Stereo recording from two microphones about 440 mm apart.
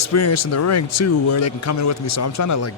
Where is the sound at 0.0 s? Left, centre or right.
Left.